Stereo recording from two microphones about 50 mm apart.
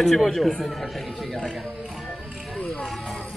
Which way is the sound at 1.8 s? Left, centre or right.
Centre.